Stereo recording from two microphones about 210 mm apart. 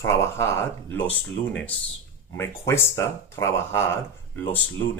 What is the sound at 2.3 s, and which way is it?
Speech, 10° left (ahead or behind).